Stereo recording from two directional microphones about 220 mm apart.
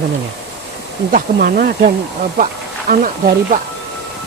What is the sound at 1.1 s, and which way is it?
Speech, 40° right (ahead or behind).